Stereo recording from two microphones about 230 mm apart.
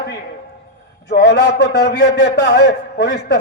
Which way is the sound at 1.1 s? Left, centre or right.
Left.